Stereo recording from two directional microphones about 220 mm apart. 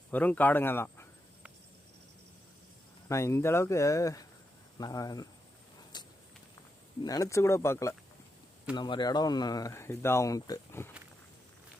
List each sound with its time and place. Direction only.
0.1 s speech: 10° left (ahead or behind)
3.1 s speech: 15° left (ahead or behind)
5.9 s walk: 20° left (ahead or behind)
7.0 s speech: 15° left (ahead or behind)